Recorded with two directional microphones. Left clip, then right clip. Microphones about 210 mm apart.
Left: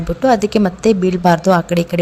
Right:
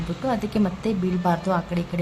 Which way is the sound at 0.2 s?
35° left (ahead or behind).